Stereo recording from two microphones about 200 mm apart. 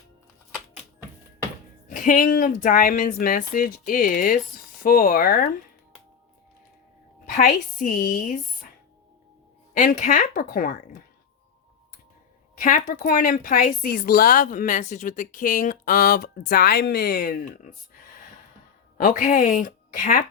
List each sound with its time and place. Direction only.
1.9 s a woman's voice: 45° left (ahead or behind)
7.3 s a woman's voice: 45° left (ahead or behind)
9.7 s a woman's voice: 40° left (ahead or behind)
12.5 s a woman's voice: 45° left (ahead or behind)
18.9 s a woman's voice: 40° left (ahead or behind)